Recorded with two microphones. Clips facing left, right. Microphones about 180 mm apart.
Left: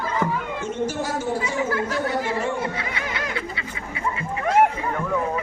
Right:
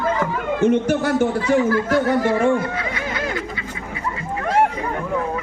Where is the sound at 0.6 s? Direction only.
60° right (ahead or behind).